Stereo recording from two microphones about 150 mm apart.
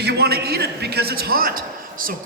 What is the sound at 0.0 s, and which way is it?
A man's voice, 90° right.